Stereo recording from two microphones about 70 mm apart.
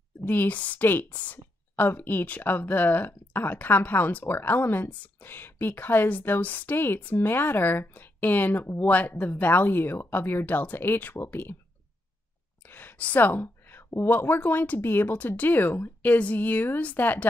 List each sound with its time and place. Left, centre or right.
0.2 s speech: left
12.6 s speech: left